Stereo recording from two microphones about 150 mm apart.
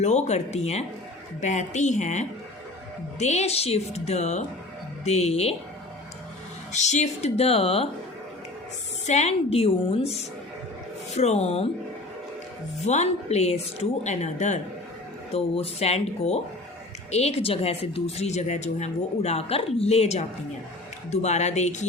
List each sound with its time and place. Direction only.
0.0 s a woman's voice: 50° left (ahead or behind)
6.7 s a woman's voice: 50° left (ahead or behind)
9.0 s a woman's voice: 50° left (ahead or behind)
12.8 s a woman's voice: 50° left (ahead or behind)
15.3 s a woman's voice: 40° left (ahead or behind)